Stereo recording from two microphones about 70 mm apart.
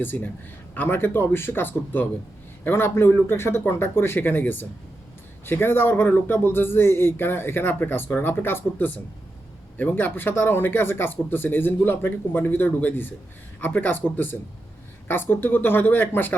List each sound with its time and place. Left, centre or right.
0.0 s speech: left